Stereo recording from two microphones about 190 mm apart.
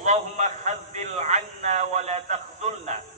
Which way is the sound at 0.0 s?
40° right (ahead or behind).